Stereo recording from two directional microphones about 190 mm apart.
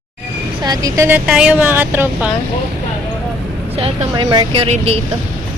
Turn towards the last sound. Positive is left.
turn(degrees=-30)  # may be behind; listen again after turning